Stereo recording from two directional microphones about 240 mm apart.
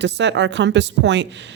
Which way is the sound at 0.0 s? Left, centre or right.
Right.